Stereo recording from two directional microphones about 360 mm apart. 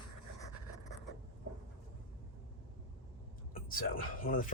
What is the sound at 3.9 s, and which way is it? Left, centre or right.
Speech, left.